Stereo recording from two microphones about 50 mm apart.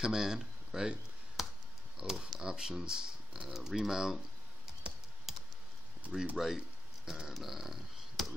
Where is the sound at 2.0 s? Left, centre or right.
Centre.